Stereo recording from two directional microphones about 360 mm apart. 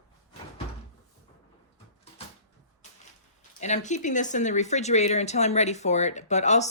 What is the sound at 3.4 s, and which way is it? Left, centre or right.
Speech, centre.